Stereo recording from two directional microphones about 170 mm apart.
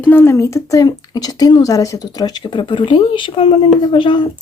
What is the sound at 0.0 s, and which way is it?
Speech, 10° left (ahead or behind).